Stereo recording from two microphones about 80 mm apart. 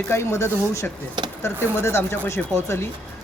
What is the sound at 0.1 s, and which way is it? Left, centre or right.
Speech, left.